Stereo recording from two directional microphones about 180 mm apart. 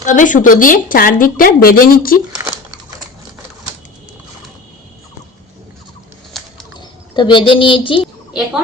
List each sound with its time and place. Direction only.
0.0 s speech: 45° left (ahead or behind)
2.4 s crumpling: 15° right (ahead or behind)
6.3 s bird flight: centre (ahead or behind)
6.7 s speech: 25° left (ahead or behind)